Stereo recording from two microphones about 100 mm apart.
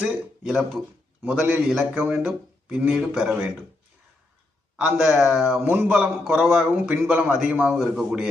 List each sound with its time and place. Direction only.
0.0 s speech: 10° right (ahead or behind)
1.6 s a man's voice: 5° right (ahead or behind)
1.9 s speech: 20° right (ahead or behind)
4.9 s speech: 10° right (ahead or behind)
7.8 s a man's voice: 5° right (ahead or behind)